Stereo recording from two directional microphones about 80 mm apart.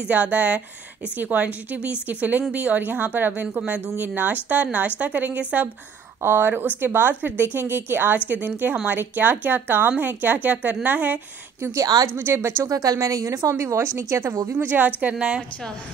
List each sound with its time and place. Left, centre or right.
0.0 s a woman's voice: centre
6.2 s a woman's voice: right
11.6 s a woman's voice: right
12.2 s a woman's voice: right
12.6 s a woman's voice: right
14.5 s a woman's voice: right